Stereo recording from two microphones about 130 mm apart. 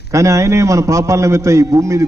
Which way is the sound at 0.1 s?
25° right (ahead or behind).